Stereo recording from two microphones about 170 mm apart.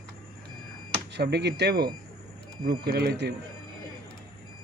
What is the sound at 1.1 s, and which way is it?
Speech, 80° right.